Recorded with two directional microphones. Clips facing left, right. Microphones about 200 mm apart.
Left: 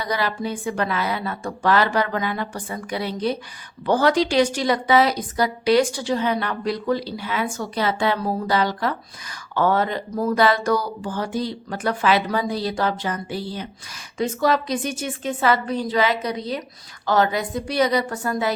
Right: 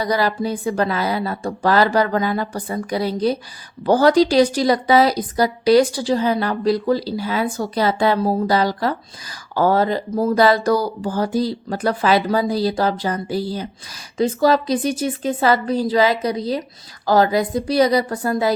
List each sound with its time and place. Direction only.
0.0 s a woman's voice: 40° right (ahead or behind)